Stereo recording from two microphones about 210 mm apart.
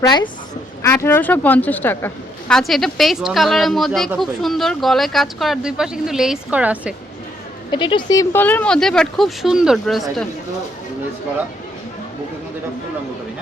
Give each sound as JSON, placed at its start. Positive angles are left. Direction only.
{"t": 0.0, "sound": "a woman's voice", "side_deg": 20}
{"t": 7.7, "sound": "a woman's voice", "side_deg": 20}